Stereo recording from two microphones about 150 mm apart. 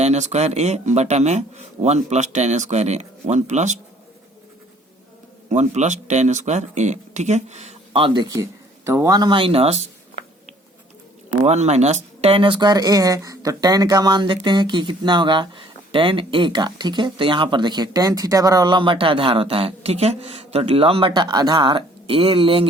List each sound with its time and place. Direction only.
0.0 s speech: 50° right (ahead or behind)
5.5 s speech: 50° right (ahead or behind)
11.4 s speech: 50° right (ahead or behind)